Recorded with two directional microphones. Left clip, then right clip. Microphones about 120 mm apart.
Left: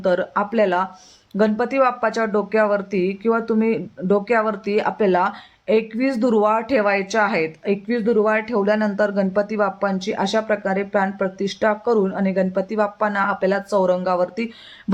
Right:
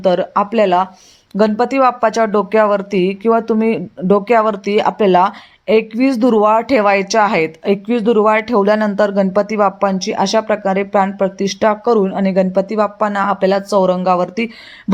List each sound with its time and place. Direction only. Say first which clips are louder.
0.0 s speech: right 6 dB; 30° right (ahead or behind)
11.9 s speech: right 6 dB; 20° right (ahead or behind)